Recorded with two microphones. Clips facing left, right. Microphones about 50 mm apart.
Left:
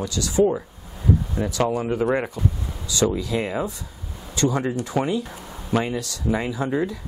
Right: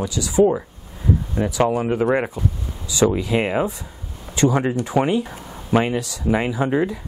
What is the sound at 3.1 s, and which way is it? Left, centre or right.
Speech, right.